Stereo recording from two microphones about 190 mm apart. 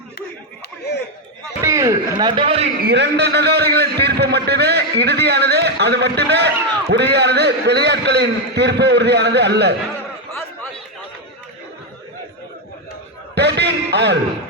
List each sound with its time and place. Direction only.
1.6 s a man's voice: 15° right (ahead or behind)
2.8 s a man's voice: 65° right (ahead or behind)
13.3 s a man's voice: 60° right (ahead or behind)